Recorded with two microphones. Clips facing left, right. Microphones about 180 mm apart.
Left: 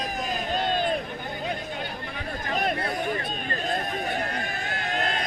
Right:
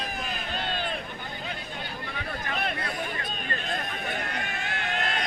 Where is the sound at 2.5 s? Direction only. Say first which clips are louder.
Left 6 dB; 40° left (ahead or behind).